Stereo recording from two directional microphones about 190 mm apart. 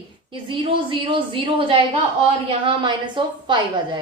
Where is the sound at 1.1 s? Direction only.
25° right (ahead or behind).